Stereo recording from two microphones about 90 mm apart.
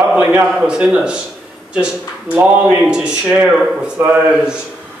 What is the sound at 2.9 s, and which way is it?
Speech, 10° right (ahead or behind).